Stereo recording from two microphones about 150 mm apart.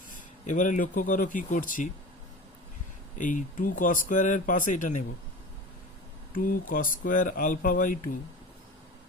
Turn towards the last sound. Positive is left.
turn(degrees=65)  # may be behind; listen again after turning